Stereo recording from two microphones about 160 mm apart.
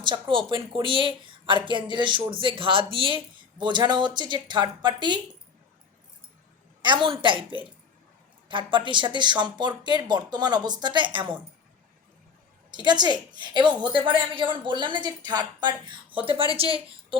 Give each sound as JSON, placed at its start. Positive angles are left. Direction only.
{"t": 0.0, "sound": "a woman's voice", "side_deg": -30}
{"t": 6.8, "sound": "a woman's voice", "side_deg": -30}
{"t": 8.4, "sound": "a woman's voice", "side_deg": -30}
{"t": 12.7, "sound": "a woman's voice", "side_deg": -25}